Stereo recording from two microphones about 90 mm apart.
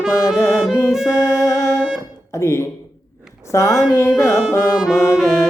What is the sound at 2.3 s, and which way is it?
Speech, 30° left (ahead or behind).